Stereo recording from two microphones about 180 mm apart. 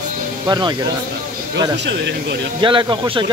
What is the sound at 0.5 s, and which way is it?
Speech, 25° right (ahead or behind).